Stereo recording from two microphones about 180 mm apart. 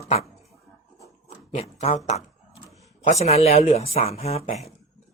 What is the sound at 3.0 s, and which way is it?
Speech, 35° left (ahead or behind).